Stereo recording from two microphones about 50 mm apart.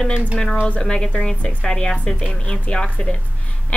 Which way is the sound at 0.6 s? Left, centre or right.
Left.